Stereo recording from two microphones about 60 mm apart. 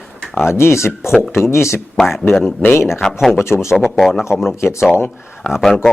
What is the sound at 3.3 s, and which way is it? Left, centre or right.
Speech, left.